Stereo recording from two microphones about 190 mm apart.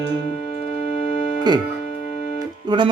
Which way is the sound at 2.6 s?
25° right (ahead or behind).